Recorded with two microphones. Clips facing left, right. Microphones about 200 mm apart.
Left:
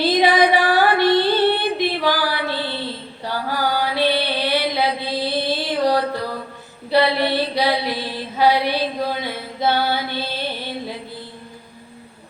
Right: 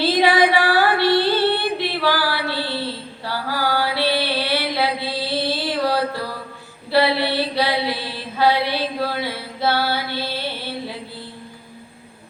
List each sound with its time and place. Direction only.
0.0 s female singing: 15° left (ahead or behind)
3.2 s mantra: 20° left (ahead or behind)